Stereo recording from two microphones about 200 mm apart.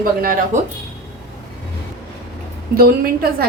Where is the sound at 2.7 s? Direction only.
50° right (ahead or behind).